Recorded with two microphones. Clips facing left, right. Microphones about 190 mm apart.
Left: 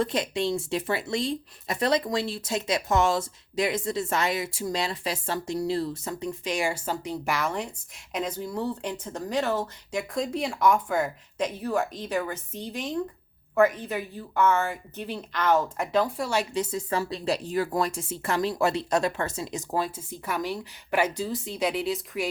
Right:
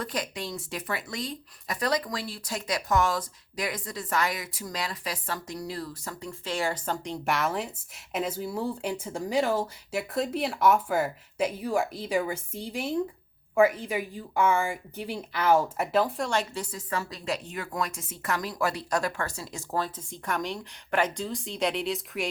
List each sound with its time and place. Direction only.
0.0 s speech: 25° left (ahead or behind); by 16.5 s 5° left (ahead or behind)
16.6 s speech: 25° left (ahead or behind); by 22.3 s centre (ahead or behind)